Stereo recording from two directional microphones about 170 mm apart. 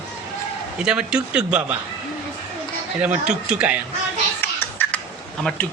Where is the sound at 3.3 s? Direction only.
5° right (ahead or behind).